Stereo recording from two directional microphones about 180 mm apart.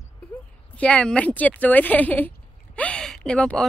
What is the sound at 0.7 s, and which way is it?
Speech, 5° left (ahead or behind).